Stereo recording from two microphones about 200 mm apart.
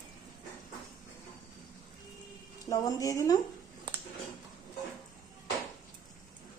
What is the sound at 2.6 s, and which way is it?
Speech, 15° left (ahead or behind).